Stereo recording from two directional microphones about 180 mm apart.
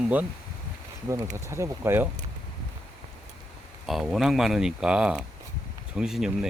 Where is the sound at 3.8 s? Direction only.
Centre (ahead or behind).